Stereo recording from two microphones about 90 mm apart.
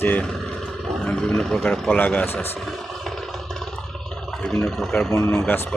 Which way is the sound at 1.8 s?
25° left (ahead or behind).